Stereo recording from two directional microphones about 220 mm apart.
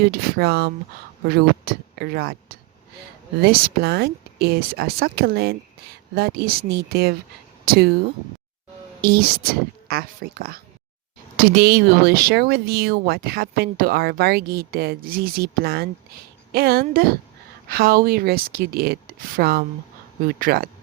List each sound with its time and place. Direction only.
0.0 s speech: 45° right (ahead or behind)
9.0 s a woman's voice: 45° right (ahead or behind)